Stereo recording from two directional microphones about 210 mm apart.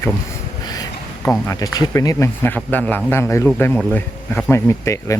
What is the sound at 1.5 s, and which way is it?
Speech, 15° left (ahead or behind).